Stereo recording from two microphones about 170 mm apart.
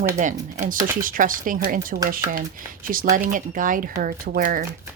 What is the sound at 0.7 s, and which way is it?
A woman's voice, 55° right (ahead or behind).